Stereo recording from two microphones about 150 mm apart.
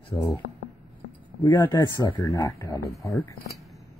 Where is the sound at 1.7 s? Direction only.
30° left (ahead or behind).